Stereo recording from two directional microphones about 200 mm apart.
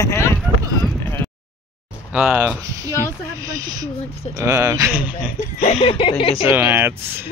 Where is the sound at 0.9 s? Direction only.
10° left (ahead or behind).